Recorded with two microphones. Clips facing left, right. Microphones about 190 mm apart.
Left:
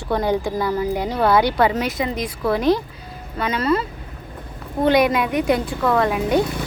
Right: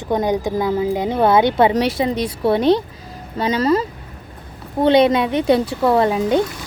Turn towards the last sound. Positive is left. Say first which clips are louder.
# right 3 dB
turn(degrees=-30)  # may be behind; listen again after turning